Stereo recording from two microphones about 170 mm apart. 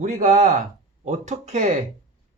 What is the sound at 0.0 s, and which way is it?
Speech, 50° right (ahead or behind).